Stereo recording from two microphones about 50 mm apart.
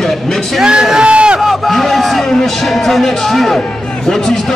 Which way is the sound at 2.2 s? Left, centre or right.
Centre.